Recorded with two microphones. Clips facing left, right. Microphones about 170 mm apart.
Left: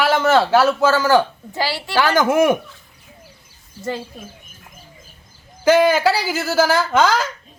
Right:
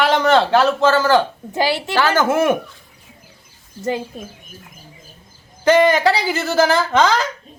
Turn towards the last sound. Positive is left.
turn(degrees=5)  # may be behind; listen again after turning